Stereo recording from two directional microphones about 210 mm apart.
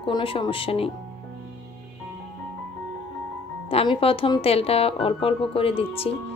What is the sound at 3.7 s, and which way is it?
A woman's voice, 25° left (ahead or behind).